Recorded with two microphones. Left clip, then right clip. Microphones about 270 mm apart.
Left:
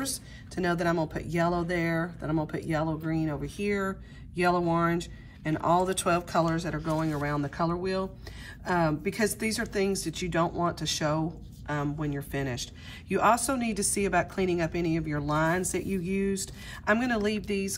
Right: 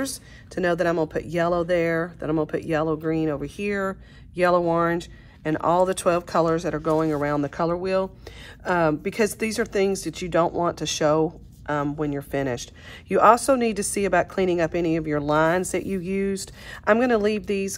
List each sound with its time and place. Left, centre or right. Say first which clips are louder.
0.0 s a woman's voice: right 5 dB; right
5.5 s a woman's voice: right 5 dB; right